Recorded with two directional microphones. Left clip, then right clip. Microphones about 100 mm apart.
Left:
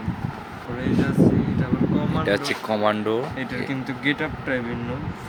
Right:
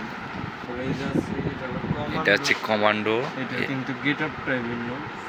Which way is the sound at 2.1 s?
35° left (ahead or behind).